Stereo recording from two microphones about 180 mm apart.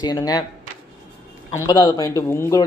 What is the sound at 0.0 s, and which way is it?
Speech, 20° left (ahead or behind).